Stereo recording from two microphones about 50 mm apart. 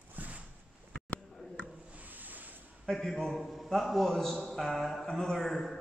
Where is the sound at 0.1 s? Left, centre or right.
Right.